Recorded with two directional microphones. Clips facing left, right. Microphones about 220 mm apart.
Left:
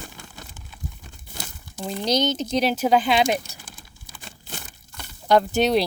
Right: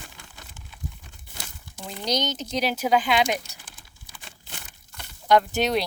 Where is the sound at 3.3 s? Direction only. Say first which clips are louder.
Left 4 dB; 40° left (ahead or behind).